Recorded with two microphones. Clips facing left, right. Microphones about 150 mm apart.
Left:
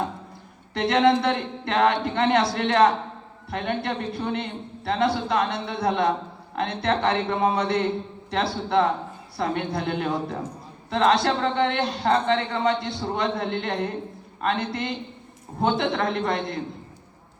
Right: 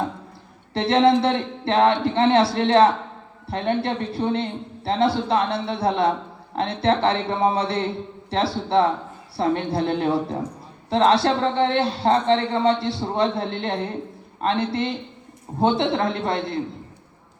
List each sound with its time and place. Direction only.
0.7 s a man's voice: 30° right (ahead or behind)